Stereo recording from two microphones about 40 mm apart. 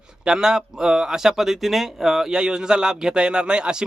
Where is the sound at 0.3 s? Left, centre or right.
Centre.